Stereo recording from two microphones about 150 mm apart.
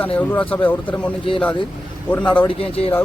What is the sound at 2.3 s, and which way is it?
Speech, 35° left (ahead or behind).